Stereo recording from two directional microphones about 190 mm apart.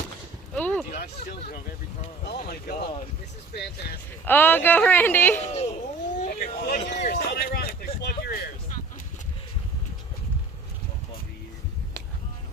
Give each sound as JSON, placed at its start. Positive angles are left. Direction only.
{"t": 0.5, "sound": "a sound", "side_deg": 5}
{"t": 2.2, "sound": "speech", "side_deg": 55}
{"t": 4.3, "sound": "speech", "side_deg": 10}
{"t": 5.4, "sound": "speech", "side_deg": 35}